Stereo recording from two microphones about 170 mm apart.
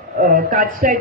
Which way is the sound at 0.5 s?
55° right (ahead or behind).